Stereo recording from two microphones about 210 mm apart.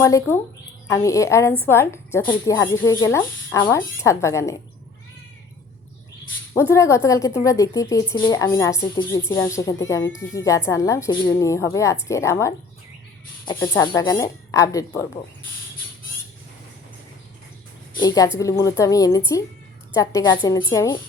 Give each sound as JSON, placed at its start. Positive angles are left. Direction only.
{"t": 0.0, "sound": "speech", "side_deg": 15}
{"t": 6.5, "sound": "speech", "side_deg": 10}
{"t": 13.8, "sound": "speech", "side_deg": 20}
{"t": 18.0, "sound": "speech", "side_deg": 20}